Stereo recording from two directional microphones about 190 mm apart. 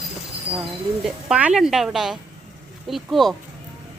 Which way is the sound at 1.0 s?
5° right (ahead or behind).